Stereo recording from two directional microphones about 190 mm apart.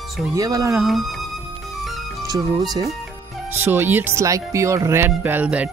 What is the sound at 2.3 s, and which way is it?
Speech, 20° right (ahead or behind).